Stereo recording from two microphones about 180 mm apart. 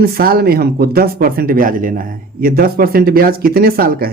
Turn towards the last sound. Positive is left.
turn(degrees=-55)  # may be behind; listen again after turning